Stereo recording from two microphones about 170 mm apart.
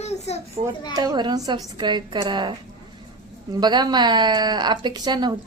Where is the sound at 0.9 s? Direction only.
25° right (ahead or behind).